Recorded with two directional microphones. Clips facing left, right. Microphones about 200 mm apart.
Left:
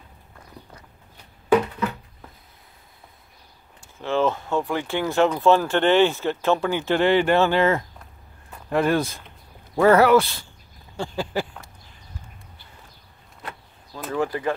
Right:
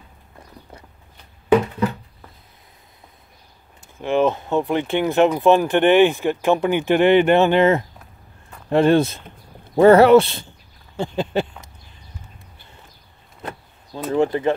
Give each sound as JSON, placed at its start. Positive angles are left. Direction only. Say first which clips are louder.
{"t": 4.0, "sound": "speech", "louder": "right 4 dB", "side_deg": -15}
{"t": 14.1, "sound": "speech", "louder": "right 6 dB", "side_deg": -25}